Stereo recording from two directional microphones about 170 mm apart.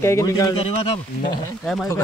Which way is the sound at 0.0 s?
15° left (ahead or behind).